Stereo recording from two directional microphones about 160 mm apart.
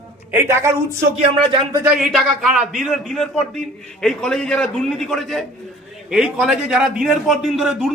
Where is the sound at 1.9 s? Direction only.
5° right (ahead or behind).